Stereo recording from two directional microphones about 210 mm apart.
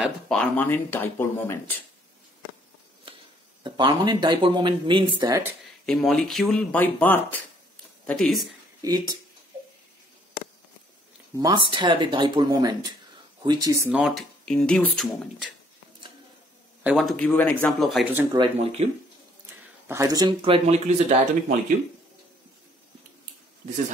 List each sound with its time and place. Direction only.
0.0 s speech: 5° left (ahead or behind)
3.6 s speech: 20° right (ahead or behind)
5.9 s speech: centre (ahead or behind)
8.8 s speech: 15° right (ahead or behind)
11.3 s speech: 20° right (ahead or behind)
13.8 s speech: centre (ahead or behind)
16.8 s speech: centre (ahead or behind)
18.3 s speech: 25° right (ahead or behind)
19.9 s speech: 15° right (ahead or behind)